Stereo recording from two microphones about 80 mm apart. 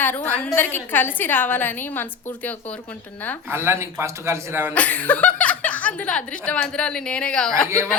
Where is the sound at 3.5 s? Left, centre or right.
Right.